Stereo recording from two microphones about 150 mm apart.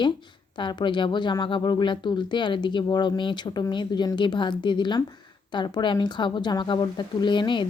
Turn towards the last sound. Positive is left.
turn(degrees=30)  # may be behind; listen again after turning